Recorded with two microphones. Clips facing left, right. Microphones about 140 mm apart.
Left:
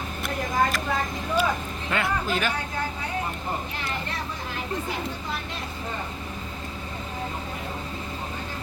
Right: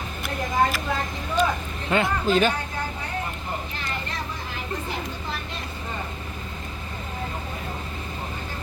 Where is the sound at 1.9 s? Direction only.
25° right (ahead or behind).